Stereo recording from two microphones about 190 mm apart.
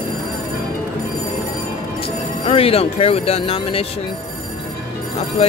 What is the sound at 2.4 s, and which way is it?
Speech, 30° left (ahead or behind).